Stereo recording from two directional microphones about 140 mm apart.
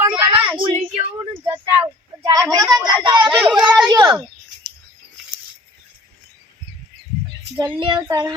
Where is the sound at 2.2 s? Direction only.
25° right (ahead or behind).